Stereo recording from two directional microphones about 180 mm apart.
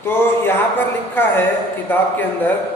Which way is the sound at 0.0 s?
10° left (ahead or behind).